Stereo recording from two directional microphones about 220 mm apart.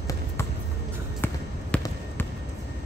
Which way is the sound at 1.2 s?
10° left (ahead or behind).